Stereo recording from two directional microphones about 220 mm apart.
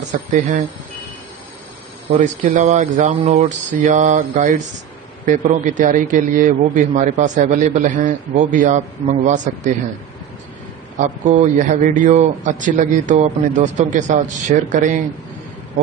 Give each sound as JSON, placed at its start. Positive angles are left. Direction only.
{"t": 0.1, "sound": "a man's voice", "side_deg": -35}
{"t": 2.1, "sound": "a man's voice", "side_deg": -35}
{"t": 11.0, "sound": "a man's voice", "side_deg": -35}